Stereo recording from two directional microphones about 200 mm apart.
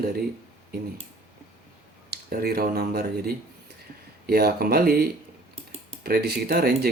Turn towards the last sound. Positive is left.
turn(degrees=-50)  # may be behind; listen again after turning